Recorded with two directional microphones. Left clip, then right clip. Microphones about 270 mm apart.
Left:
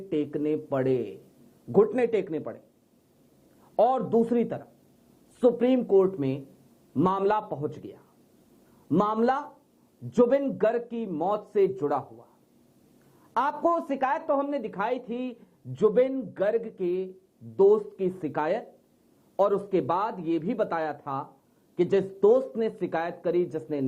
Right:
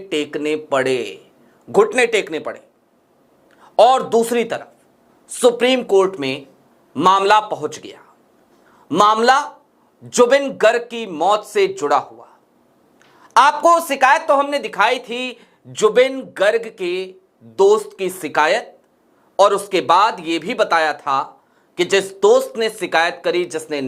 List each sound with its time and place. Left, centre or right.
0.1 s speech: centre
12.0 s speech: centre
13.3 s speech: centre